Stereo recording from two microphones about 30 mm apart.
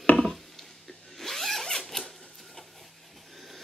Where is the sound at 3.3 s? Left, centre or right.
Centre.